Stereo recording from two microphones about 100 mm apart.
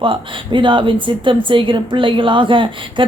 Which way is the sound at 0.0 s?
55° right (ahead or behind).